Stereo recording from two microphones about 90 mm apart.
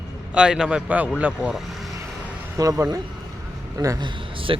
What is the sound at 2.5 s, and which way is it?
Speech, 40° right (ahead or behind).